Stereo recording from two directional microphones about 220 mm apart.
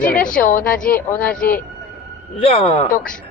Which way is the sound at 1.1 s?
5° left (ahead or behind).